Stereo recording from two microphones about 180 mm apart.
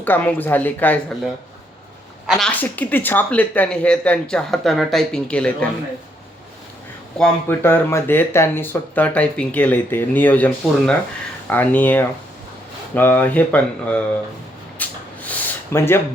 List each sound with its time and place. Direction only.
0.0 s speech: 10° left (ahead or behind)
2.2 s speech: 5° left (ahead or behind)
7.2 s speech: 10° left (ahead or behind)
14.8 s a sound: 10° left (ahead or behind)